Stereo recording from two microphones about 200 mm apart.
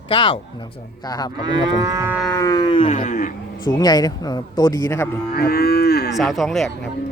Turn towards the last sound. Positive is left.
turn(degrees=0)  # may be behind; listen again after turning